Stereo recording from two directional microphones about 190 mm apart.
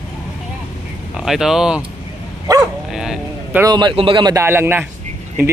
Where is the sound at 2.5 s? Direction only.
20° right (ahead or behind).